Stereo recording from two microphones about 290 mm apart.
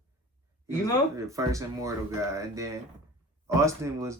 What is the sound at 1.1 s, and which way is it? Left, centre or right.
Speech, centre.